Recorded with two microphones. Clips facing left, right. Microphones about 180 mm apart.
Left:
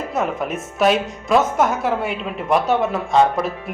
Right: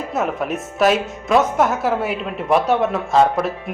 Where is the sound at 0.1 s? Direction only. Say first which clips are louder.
Right 2 dB; centre (ahead or behind).